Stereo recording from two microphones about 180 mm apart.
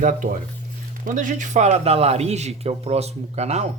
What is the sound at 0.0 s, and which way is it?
A man's voice, 50° right (ahead or behind).